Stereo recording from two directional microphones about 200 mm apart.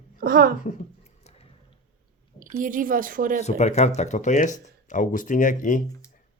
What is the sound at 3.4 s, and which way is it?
Speech, 35° left (ahead or behind).